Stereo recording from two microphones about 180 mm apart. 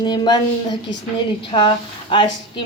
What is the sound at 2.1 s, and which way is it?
Speech, 25° left (ahead or behind).